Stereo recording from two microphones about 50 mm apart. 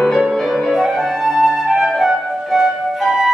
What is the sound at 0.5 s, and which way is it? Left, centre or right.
Music, centre.